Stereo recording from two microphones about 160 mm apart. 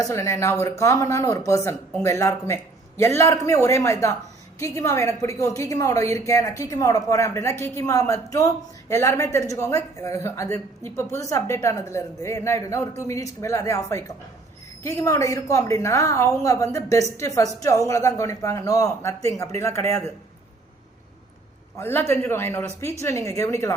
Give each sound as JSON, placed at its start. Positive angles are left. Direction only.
{"t": 0.0, "sound": "a woman's voice", "side_deg": 20}
{"t": 21.8, "sound": "a woman's voice", "side_deg": 15}